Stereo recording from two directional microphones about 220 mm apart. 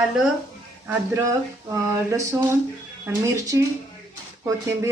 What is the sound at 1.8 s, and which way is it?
Speech, 15° right (ahead or behind).